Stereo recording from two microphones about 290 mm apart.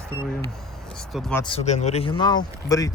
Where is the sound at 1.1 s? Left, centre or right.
Centre.